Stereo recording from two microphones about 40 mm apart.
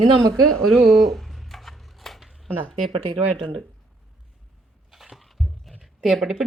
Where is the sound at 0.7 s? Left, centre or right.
Centre.